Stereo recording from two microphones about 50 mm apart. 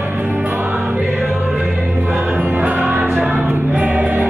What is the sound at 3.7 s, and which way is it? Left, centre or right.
Choir, right.